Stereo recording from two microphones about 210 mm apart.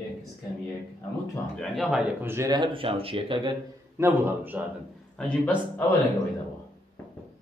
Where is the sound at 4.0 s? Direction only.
10° right (ahead or behind).